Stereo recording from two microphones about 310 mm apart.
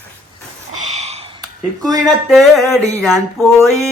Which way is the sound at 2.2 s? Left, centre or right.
Centre.